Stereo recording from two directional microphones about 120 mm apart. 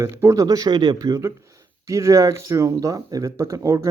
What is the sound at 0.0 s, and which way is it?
Speech, 25° right (ahead or behind).